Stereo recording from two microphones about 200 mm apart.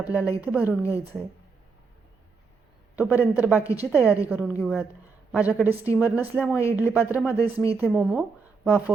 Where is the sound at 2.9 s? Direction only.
10° right (ahead or behind).